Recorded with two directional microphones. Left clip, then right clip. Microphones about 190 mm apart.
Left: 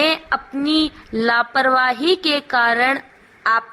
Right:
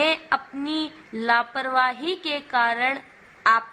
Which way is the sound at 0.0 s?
30° left (ahead or behind).